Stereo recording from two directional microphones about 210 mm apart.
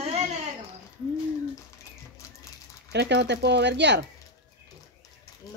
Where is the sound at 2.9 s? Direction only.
55° right (ahead or behind).